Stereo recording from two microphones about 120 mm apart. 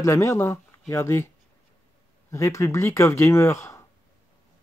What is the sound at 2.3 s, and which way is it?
Speech, 25° left (ahead or behind).